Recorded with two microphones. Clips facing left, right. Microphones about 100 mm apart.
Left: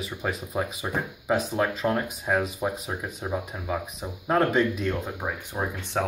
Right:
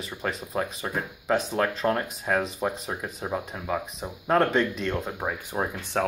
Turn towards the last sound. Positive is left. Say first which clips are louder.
# right 1 dB
turn(degrees=0)  # may be behind; listen again after turning